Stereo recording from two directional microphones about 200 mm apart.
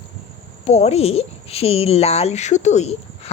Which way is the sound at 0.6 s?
35° left (ahead or behind).